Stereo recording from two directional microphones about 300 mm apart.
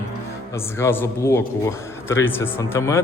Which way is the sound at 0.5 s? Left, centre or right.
Centre.